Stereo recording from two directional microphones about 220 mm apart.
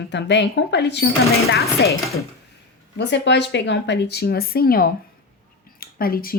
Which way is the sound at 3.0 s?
50° left (ahead or behind).